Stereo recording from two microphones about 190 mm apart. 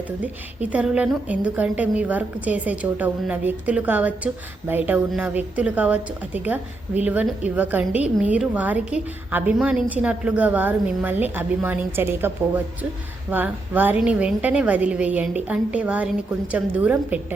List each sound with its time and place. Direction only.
0.2 s a woman's voice: 5° right (ahead or behind)
13.3 s a woman's voice: 10° right (ahead or behind)